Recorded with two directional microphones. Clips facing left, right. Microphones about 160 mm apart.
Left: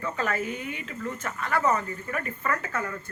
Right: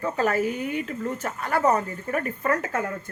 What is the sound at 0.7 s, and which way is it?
Speech, 45° right (ahead or behind).